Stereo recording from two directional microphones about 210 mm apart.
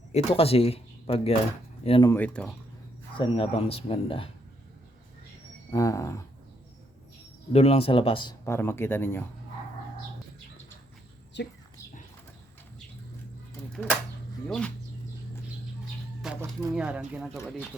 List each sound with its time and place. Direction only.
0.1 s speech: 25° left (ahead or behind)
2.0 s speech: 10° left (ahead or behind)
3.2 s speech: 25° left (ahead or behind)
5.7 s speech: 15° left (ahead or behind)
7.5 s speech: 30° left (ahead or behind)
8.4 s speech: 10° left (ahead or behind)
11.3 s speech: 55° left (ahead or behind)
13.8 s speech: 5° left (ahead or behind)
16.2 s speech: 5° right (ahead or behind)